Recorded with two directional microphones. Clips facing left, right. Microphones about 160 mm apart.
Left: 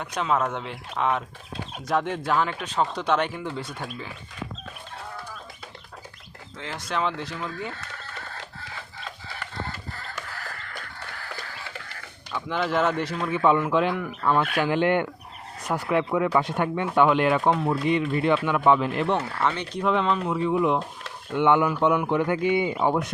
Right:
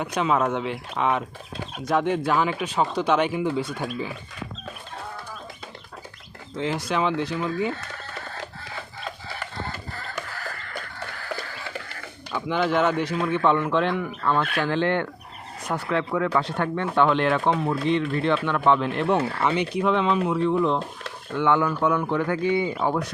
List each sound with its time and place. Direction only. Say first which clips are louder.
0.0 s speech: right 3 dB; 5° right (ahead or behind)
6.7 s speech: right 2 dB; 5° right (ahead or behind)
12.3 s speech: right 3 dB; centre (ahead or behind)
16.0 s speech: left 1 dB; 15° left (ahead or behind)